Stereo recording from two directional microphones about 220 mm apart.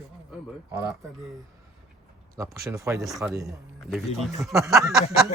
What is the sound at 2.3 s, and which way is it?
Speech, 15° right (ahead or behind).